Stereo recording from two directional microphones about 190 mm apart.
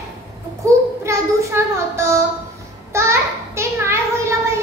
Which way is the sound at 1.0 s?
15° right (ahead or behind).